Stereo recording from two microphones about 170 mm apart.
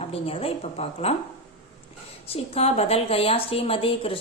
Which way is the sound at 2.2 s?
35° left (ahead or behind).